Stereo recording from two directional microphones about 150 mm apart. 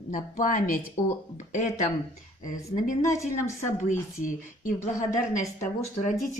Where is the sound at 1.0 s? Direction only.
50° left (ahead or behind).